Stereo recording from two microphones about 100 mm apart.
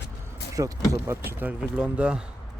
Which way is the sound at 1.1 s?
20° right (ahead or behind).